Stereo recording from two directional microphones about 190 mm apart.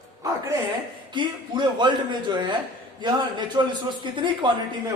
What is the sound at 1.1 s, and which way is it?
A man's voice, 25° right (ahead or behind).